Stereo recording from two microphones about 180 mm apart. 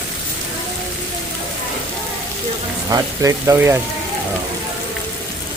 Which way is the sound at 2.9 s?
15° right (ahead or behind).